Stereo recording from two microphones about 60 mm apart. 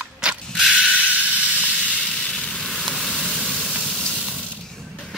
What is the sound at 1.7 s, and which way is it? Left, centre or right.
Sizzle, centre.